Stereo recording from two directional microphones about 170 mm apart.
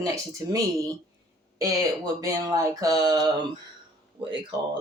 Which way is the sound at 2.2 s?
20° right (ahead or behind).